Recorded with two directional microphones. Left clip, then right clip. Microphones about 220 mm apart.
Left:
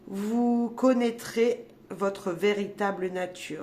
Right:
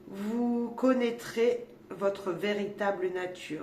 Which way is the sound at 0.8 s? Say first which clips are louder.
Left 2 dB; 45° left (ahead or behind).